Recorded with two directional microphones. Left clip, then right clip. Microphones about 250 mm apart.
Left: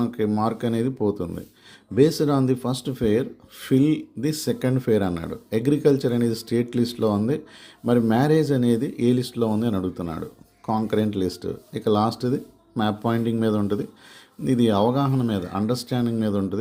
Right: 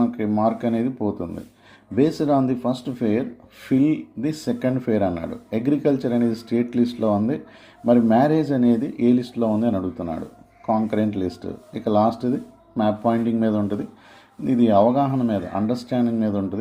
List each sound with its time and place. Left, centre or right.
0.0 s speech: left